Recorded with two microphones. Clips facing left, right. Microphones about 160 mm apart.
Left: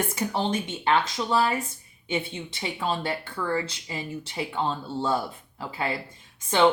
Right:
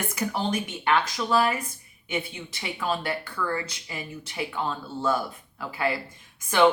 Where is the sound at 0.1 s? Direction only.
25° left (ahead or behind).